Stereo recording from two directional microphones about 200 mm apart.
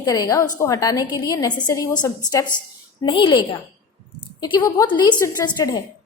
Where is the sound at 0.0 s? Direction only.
15° left (ahead or behind).